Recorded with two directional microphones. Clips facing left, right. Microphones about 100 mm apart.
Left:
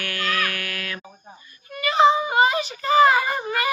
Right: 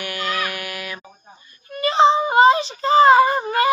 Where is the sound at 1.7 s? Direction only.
30° right (ahead or behind).